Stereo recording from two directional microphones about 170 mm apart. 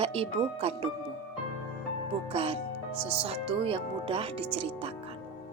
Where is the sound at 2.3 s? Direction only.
35° right (ahead or behind).